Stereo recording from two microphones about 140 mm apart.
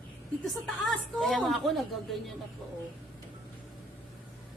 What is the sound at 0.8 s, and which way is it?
A woman's voice, centre (ahead or behind).